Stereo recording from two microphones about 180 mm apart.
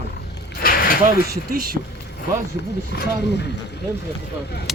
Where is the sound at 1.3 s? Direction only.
55° right (ahead or behind).